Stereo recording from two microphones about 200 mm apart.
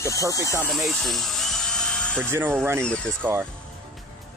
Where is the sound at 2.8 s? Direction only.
5° left (ahead or behind).